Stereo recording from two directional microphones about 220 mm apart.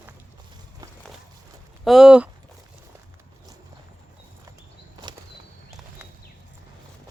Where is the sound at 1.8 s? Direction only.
Centre (ahead or behind).